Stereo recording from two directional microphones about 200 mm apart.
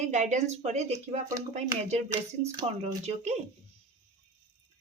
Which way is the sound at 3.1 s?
35° right (ahead or behind).